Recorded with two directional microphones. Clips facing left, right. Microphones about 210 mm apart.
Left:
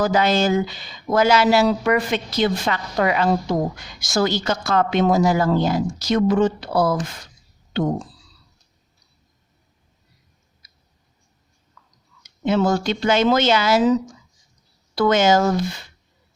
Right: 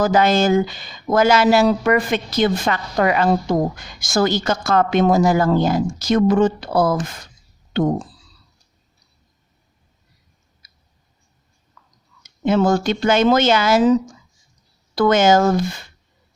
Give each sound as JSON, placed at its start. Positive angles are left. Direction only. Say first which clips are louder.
{"t": 0.0, "sound": "speech", "louder": "right 3 dB", "side_deg": -50}
{"t": 12.2, "sound": "speech", "louder": "right 2 dB", "side_deg": -50}